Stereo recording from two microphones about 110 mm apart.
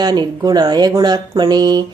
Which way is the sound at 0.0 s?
40° right (ahead or behind).